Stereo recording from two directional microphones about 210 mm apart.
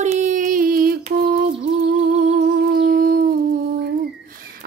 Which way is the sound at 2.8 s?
45° right (ahead or behind).